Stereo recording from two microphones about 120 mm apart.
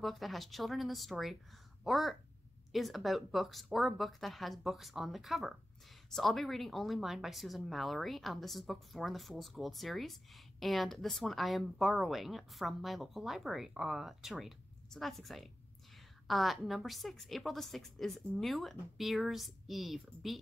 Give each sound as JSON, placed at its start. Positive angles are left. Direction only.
{"t": 0.0, "sound": "a woman's voice", "side_deg": 0}